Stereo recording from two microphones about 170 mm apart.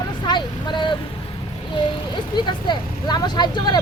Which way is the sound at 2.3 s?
25° left (ahead or behind).